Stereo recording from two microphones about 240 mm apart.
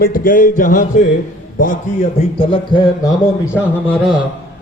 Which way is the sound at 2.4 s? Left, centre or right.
Left.